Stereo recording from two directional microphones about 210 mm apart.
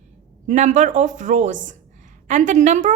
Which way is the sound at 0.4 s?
35° right (ahead or behind).